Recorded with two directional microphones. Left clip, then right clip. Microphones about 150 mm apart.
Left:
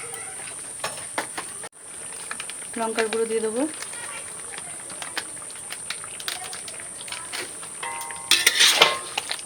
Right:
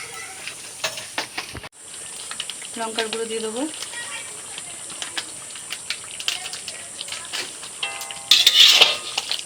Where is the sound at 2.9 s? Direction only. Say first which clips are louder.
Left 1 dB; 15° left (ahead or behind).